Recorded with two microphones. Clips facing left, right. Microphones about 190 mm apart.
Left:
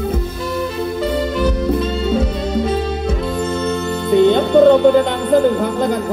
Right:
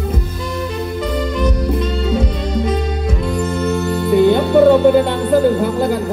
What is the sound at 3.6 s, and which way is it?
Music, 20° left (ahead or behind).